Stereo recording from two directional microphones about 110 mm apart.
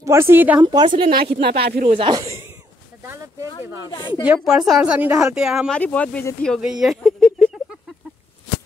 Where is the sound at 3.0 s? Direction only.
25° right (ahead or behind).